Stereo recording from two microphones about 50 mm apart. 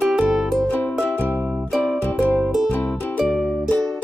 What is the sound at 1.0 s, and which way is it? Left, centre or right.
Music, left.